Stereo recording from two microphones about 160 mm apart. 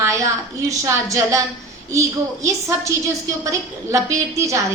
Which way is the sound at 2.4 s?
20° right (ahead or behind).